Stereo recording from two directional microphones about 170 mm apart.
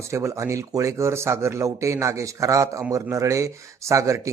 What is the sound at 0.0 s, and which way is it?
Speech, 15° right (ahead or behind).